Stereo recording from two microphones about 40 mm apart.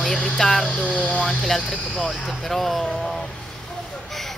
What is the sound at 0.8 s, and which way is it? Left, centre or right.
Speech, left.